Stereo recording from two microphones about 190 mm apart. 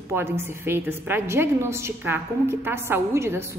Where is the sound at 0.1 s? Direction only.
10° right (ahead or behind).